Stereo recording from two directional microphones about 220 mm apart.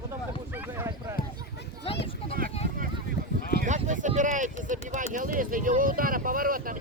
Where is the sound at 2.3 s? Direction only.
40° right (ahead or behind).